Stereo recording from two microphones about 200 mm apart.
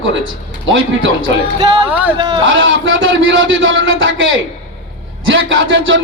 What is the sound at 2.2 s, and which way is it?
Speech, 25° right (ahead or behind).